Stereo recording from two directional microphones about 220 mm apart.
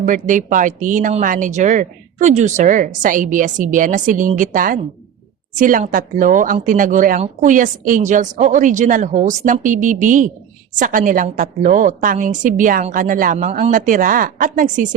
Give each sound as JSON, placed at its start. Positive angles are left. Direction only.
{"t": 0.0, "sound": "speech", "side_deg": -35}